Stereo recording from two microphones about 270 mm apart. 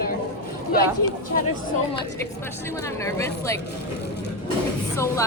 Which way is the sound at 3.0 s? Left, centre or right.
Centre.